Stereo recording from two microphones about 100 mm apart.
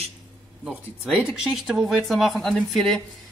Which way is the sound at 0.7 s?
5° right (ahead or behind).